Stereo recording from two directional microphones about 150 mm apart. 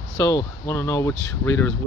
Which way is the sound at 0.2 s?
20° left (ahead or behind).